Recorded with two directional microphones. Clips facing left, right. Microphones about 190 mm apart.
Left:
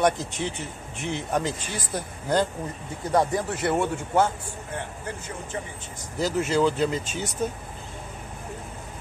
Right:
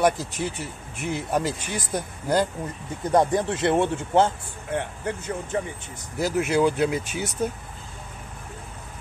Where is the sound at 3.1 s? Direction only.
20° right (ahead or behind).